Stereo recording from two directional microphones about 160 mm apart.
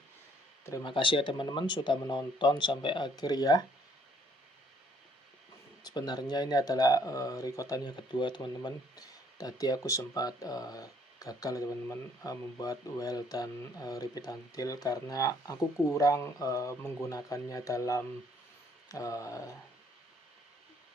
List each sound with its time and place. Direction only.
0.6 s speech: 20° left (ahead or behind)
0.9 s speech: 30° left (ahead or behind)
5.8 s speech: 25° left (ahead or behind)